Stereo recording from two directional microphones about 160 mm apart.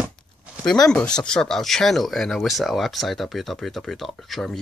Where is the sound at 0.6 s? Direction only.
5° left (ahead or behind).